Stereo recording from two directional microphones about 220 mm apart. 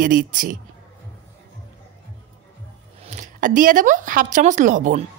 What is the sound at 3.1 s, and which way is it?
Speech, 35° right (ahead or behind).